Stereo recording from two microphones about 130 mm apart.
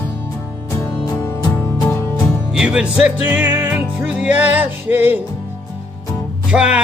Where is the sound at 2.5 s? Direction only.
5° right (ahead or behind).